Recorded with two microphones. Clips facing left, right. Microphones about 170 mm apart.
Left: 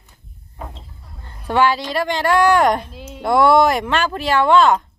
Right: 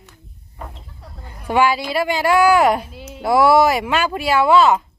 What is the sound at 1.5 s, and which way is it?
Speech, 10° right (ahead or behind).